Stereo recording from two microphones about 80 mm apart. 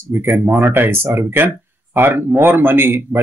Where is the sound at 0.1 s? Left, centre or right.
Right.